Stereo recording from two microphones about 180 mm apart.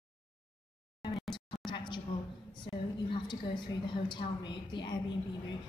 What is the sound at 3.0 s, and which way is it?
A woman's voice, 25° left (ahead or behind).